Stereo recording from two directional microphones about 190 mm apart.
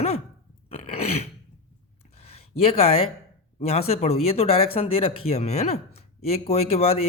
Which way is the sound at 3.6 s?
30° left (ahead or behind).